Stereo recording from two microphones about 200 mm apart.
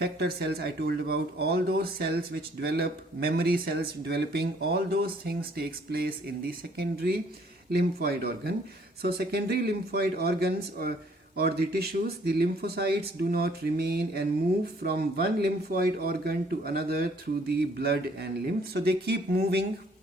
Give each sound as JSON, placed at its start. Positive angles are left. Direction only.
{"t": 0.0, "sound": "speech", "side_deg": -50}